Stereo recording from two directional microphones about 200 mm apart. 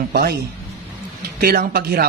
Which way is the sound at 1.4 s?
50° right (ahead or behind).